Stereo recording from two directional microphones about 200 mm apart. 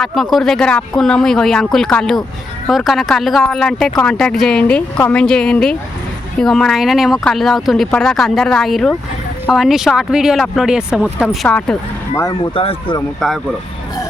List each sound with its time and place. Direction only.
0.0 s speech: centre (ahead or behind)
12.5 s speech: 25° left (ahead or behind)
13.1 s speech: centre (ahead or behind)